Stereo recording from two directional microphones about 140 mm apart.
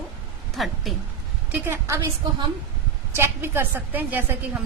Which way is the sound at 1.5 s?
15° right (ahead or behind).